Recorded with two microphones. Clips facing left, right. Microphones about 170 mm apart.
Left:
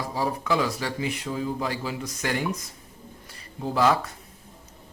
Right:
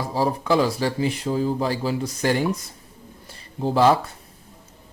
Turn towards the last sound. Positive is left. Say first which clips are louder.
# right 5 dB
turn(degrees=-30)  # may be behind; listen again after turning